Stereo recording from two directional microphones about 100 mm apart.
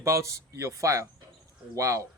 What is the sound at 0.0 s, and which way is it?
Speech, 30° right (ahead or behind).